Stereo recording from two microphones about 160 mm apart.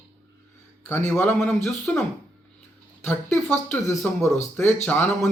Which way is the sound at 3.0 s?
10° left (ahead or behind).